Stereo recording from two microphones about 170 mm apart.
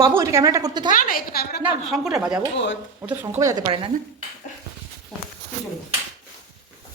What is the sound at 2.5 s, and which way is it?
Speech, 90° left.